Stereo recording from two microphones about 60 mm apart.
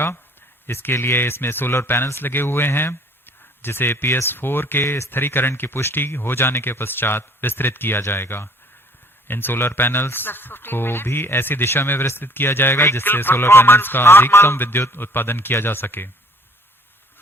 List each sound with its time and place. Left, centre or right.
0.7 s speech: left